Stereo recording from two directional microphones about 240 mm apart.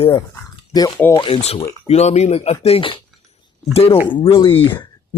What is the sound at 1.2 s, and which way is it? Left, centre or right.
Speech, left.